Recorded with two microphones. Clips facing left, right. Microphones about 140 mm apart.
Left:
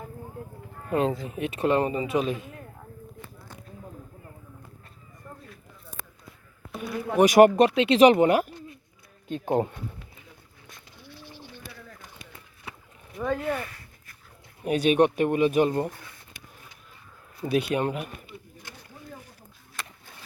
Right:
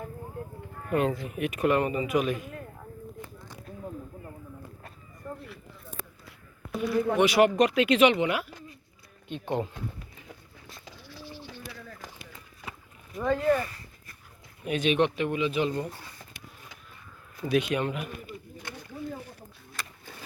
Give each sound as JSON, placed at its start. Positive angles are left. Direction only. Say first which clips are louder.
{"t": 0.9, "sound": "speech", "louder": "left 1 dB", "side_deg": 30}
{"t": 6.7, "sound": "a sound", "louder": "right 5 dB", "side_deg": 0}
{"t": 7.2, "sound": "speech", "louder": "left 7 dB", "side_deg": 45}
{"t": 7.8, "sound": "speech", "louder": "left 4 dB", "side_deg": 35}
{"t": 8.1, "sound": "speech", "louder": "left 7 dB", "side_deg": 45}
{"t": 12.6, "sound": "rowboat", "louder": "right 1 dB", "side_deg": -90}
{"t": 13.2, "sound": "speech", "louder": "right 3 dB", "side_deg": 5}
{"t": 14.6, "sound": "speech", "louder": "left 4 dB", "side_deg": 40}
{"t": 17.4, "sound": "speech", "louder": "left 1 dB", "side_deg": 35}